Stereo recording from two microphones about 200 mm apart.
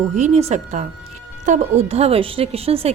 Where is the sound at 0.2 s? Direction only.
35° right (ahead or behind).